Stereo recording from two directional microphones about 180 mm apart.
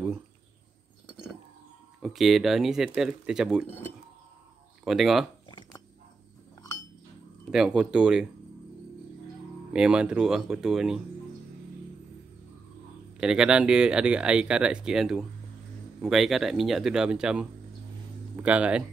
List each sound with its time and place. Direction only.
2.0 s speech: centre (ahead or behind)
4.8 s speech: centre (ahead or behind)
5.5 s a sound: 25° left (ahead or behind)
7.5 s speech: 5° right (ahead or behind)
9.7 s speech: 5° right (ahead or behind)
13.2 s speech: 5° right (ahead or behind)